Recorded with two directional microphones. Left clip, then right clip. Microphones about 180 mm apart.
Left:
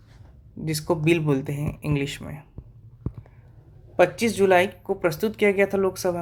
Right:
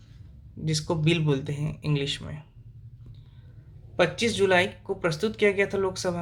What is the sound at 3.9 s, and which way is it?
Speech, 35° left (ahead or behind).